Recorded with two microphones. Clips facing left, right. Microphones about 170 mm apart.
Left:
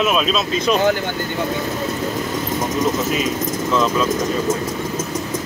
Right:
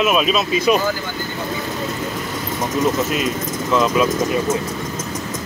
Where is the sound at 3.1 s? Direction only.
5° right (ahead or behind).